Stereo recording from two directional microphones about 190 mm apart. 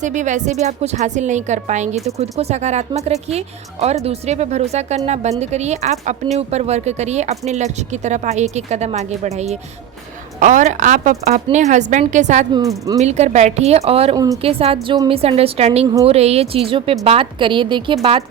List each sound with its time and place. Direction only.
0.0 s speech: 40° right (ahead or behind)
12.5 s a woman's voice: 20° right (ahead or behind)
13.0 s a woman's voice: 35° right (ahead or behind)